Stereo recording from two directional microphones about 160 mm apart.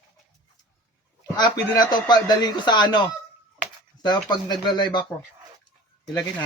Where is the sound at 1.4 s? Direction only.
25° left (ahead or behind).